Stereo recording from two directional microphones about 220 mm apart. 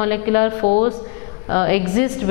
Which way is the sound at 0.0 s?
15° left (ahead or behind).